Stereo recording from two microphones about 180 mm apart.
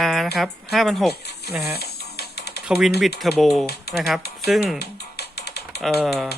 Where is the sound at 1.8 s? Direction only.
60° left (ahead or behind).